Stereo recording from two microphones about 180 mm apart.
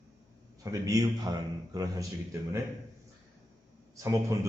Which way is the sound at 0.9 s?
20° right (ahead or behind).